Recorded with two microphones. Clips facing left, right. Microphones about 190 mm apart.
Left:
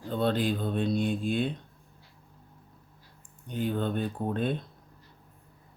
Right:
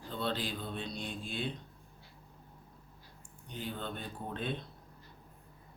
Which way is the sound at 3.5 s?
55° left (ahead or behind).